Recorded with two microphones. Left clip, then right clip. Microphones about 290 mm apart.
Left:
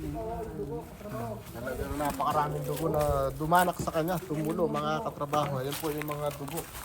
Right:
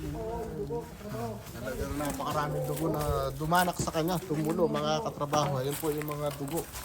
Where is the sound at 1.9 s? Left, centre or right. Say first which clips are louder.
Left 5 dB; centre.